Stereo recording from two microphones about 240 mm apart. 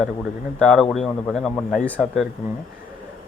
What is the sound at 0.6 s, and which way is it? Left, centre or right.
Speech, centre.